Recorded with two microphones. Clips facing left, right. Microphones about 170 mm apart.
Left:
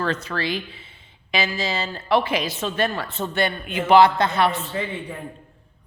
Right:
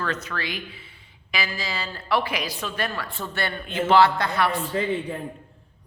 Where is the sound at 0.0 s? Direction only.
30° left (ahead or behind).